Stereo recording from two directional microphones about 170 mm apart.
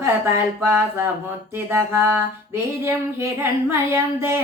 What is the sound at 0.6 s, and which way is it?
Speech, 15° right (ahead or behind).